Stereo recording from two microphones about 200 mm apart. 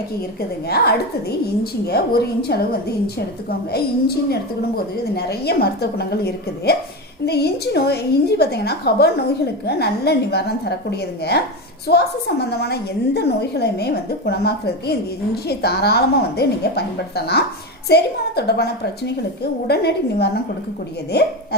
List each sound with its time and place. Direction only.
1.6 s a woman's voice: 55° left (ahead or behind)